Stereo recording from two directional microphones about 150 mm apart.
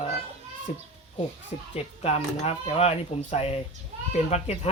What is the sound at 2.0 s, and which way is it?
Speech, 40° left (ahead or behind).